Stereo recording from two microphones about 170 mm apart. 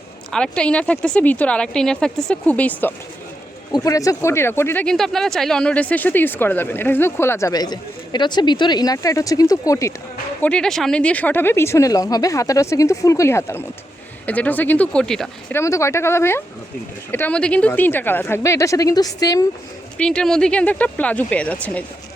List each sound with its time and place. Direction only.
0.3 s speech: 5° left (ahead or behind)
3.7 s speech: 20° left (ahead or behind)
10.4 s speech: 5° left (ahead or behind)
15.5 s speech: 15° left (ahead or behind)
20.0 s speech: 5° left (ahead or behind)